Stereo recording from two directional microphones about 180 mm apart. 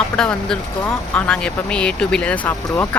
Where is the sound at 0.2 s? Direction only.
5° left (ahead or behind).